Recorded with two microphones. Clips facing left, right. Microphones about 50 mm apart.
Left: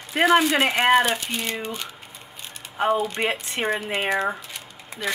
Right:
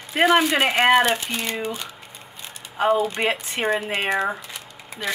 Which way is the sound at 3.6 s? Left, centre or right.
Centre.